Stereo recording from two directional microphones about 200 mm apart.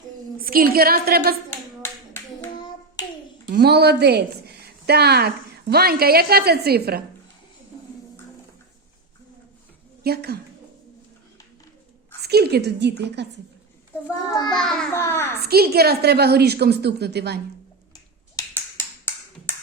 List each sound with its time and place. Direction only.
0.3 s a woman's voice: 45° right (ahead or behind)
1.8 s clapping: 15° left (ahead or behind)
3.5 s speech: 55° right (ahead or behind)
10.0 s a woman's voice: 50° right (ahead or behind)
12.2 s a woman's voice: 55° right (ahead or behind)
14.5 s babbling: centre (ahead or behind)
14.9 s a child's voice: 10° left (ahead or behind)
15.4 s a woman's voice: 50° right (ahead or behind)
18.3 s tap: 10° left (ahead or behind)